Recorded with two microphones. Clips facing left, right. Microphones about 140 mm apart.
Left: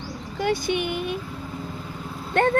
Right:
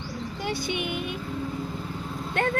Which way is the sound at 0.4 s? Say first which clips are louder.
Left 7 dB; 45° left (ahead or behind).